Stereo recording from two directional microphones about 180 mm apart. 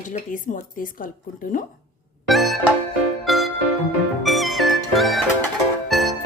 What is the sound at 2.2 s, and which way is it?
Music, centre (ahead or behind).